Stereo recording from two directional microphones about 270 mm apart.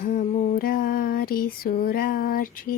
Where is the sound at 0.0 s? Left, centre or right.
Left.